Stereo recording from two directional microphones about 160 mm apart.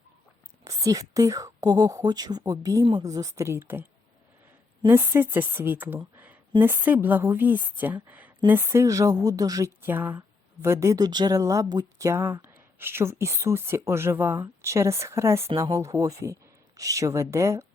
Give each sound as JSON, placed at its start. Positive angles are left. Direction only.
{"t": 0.6, "sound": "a woman's voice", "side_deg": -20}
{"t": 4.9, "sound": "a woman's voice", "side_deg": -15}